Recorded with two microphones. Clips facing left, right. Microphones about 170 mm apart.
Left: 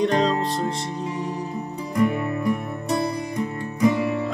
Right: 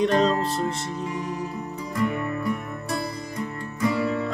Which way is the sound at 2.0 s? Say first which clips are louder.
Left 4 dB; 20° left (ahead or behind).